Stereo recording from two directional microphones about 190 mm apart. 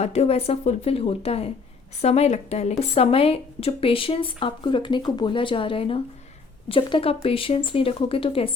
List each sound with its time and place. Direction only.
0.0 s a woman's voice: 35° left (ahead or behind)